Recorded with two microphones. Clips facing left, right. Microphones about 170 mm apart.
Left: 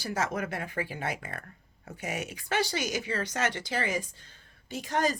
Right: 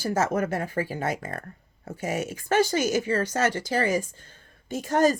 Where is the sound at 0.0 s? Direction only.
45° right (ahead or behind).